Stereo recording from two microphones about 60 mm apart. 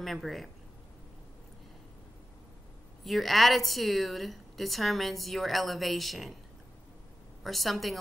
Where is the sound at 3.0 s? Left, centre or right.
Centre.